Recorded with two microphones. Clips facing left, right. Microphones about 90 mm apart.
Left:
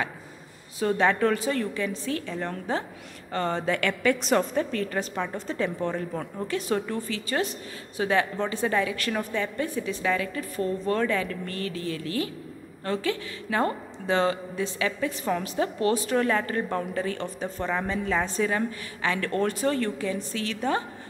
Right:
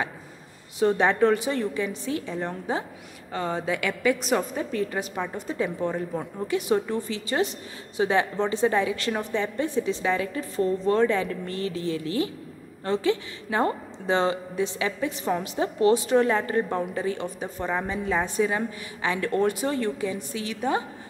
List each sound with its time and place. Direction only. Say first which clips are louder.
0.7 s a woman's voice: right 2 dB; 20° right (ahead or behind)